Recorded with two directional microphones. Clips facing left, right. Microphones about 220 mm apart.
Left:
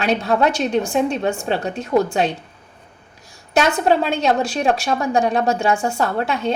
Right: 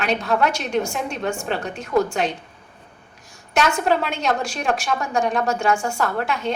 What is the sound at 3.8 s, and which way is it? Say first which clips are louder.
A woman's voice: left 4 dB; 35° left (ahead or behind).